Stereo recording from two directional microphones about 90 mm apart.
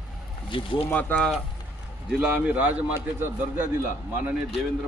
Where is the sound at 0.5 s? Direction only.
70° left (ahead or behind).